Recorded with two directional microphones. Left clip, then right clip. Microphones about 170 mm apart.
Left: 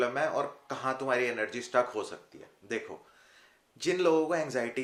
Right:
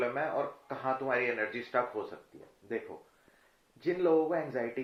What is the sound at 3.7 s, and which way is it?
Speech, 40° left (ahead or behind).